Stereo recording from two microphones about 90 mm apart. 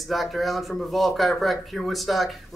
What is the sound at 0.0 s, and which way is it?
A man's voice, centre (ahead or behind).